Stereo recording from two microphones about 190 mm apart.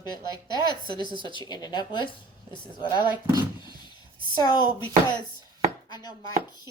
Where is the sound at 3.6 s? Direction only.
25° left (ahead or behind).